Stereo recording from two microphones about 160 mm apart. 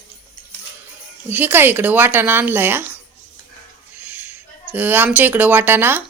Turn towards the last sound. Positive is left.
turn(degrees=-15)  # may be behind; listen again after turning